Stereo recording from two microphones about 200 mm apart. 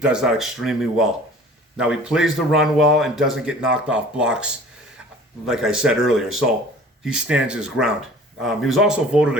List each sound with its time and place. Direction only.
0.0 s speech: 5° right (ahead or behind)